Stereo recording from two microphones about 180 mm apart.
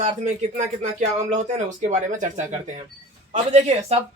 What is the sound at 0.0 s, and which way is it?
Speech, 40° right (ahead or behind).